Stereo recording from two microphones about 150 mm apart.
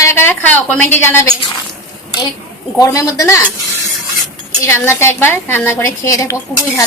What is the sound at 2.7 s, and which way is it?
Speech, 25° left (ahead or behind).